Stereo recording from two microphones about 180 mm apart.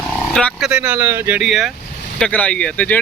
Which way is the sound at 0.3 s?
5° right (ahead or behind).